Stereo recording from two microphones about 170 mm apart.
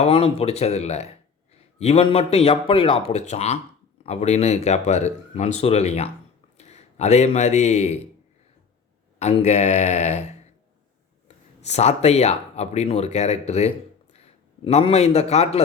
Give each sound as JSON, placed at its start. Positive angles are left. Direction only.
{"t": 0.0, "sound": "a man's voice", "side_deg": 35}
{"t": 9.1, "sound": "speech", "side_deg": 40}
{"t": 11.6, "sound": "speech", "side_deg": 40}